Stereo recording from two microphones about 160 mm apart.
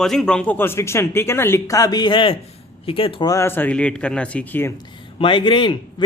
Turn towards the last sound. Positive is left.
turn(degrees=30)  # may be behind; listen again after turning